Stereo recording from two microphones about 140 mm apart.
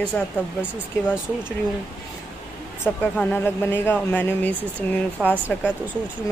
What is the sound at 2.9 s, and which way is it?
Speech, 15° left (ahead or behind).